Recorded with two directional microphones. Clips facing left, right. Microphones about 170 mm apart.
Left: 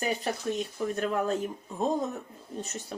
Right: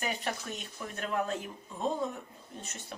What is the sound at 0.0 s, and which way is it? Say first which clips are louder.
Speech: left 5 dB; 35° left (ahead or behind).